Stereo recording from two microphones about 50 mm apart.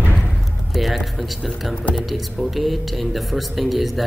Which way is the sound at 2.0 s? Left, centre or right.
Centre.